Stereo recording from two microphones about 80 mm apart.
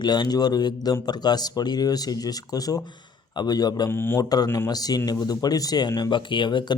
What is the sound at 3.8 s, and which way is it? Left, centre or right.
Speech, left.